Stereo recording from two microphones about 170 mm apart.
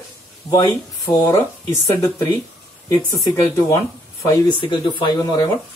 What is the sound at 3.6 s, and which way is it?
Speech, 20° left (ahead or behind).